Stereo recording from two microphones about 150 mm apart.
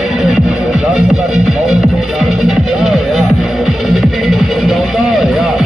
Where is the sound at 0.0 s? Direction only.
5° right (ahead or behind).